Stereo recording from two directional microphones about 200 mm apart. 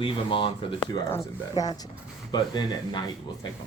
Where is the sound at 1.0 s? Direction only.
15° left (ahead or behind).